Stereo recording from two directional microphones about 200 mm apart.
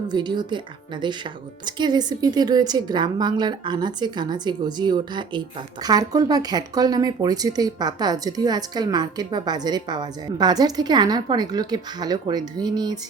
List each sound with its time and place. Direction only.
0.1 s speech: 20° right (ahead or behind)